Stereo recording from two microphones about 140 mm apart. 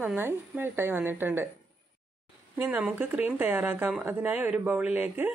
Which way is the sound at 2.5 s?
10° right (ahead or behind).